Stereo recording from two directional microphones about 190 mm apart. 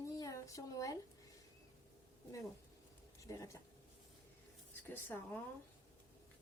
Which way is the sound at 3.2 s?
15° left (ahead or behind).